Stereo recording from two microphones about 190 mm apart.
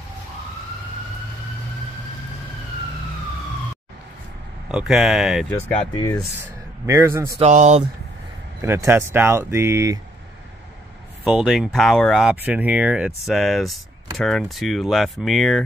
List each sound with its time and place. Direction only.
4.6 s speech: 5° right (ahead or behind)
6.9 s speech: 15° right (ahead or behind)
7.3 s speech: 40° right (ahead or behind)
8.5 s speech: 15° right (ahead or behind)
11.2 s speech: 5° right (ahead or behind)